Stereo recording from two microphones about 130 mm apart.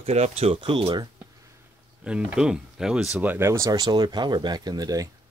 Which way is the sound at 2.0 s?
5° right (ahead or behind).